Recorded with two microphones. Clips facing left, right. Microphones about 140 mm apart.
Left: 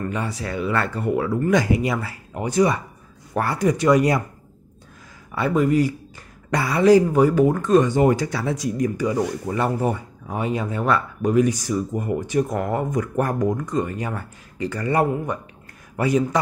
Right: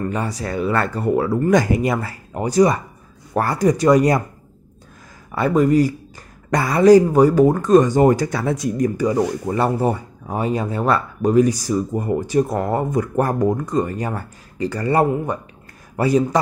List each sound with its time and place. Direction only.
0.0 s speech: 40° right (ahead or behind)
5.3 s speech: 40° right (ahead or behind)